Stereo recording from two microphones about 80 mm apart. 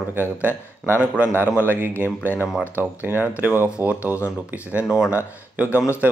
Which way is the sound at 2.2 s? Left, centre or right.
Left.